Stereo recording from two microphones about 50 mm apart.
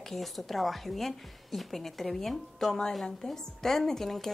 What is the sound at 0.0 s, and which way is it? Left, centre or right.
A woman's voice, centre.